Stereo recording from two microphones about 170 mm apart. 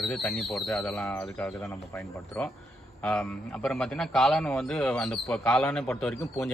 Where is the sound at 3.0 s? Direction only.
5° left (ahead or behind).